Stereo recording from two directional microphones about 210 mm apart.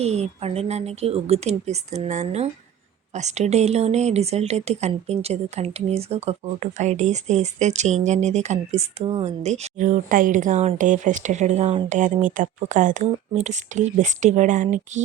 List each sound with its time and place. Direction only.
0.0 s speech: 30° right (ahead or behind)